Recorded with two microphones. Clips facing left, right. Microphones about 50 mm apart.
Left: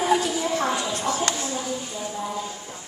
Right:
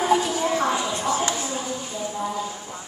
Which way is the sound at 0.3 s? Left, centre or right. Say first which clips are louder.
Right 2 dB; right.